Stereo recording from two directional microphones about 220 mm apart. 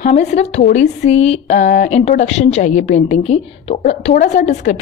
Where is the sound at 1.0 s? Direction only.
30° left (ahead or behind).